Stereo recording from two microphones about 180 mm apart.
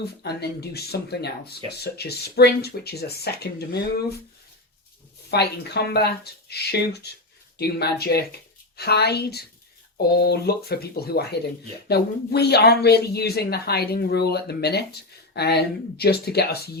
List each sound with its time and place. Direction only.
0.0 s speech: 65° left (ahead or behind)
5.3 s speech: 65° left (ahead or behind)